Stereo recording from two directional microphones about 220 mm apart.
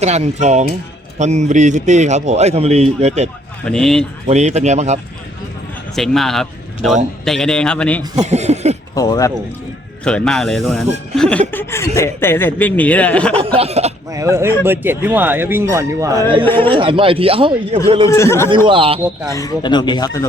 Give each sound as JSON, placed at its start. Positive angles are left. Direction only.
{"t": 0.0, "sound": "a man's voice", "side_deg": -30}
{"t": 3.7, "sound": "a man's voice", "side_deg": 0}
{"t": 4.3, "sound": "a man's voice", "side_deg": -30}
{"t": 6.0, "sound": "a man's voice", "side_deg": 0}
{"t": 8.2, "sound": "a sound", "side_deg": -30}
{"t": 9.0, "sound": "speech", "side_deg": 15}
{"t": 10.0, "sound": "a man's voice", "side_deg": 5}
{"t": 13.6, "sound": "speech", "side_deg": -30}
{"t": 14.1, "sound": "speech", "side_deg": -15}
{"t": 18.1, "sound": "speech", "side_deg": 10}
{"t": 18.5, "sound": "speech", "side_deg": -20}
{"t": 19.3, "sound": "speech", "side_deg": 15}